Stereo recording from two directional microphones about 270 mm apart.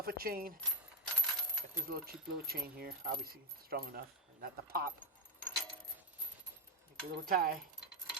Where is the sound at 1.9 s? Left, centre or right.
Right.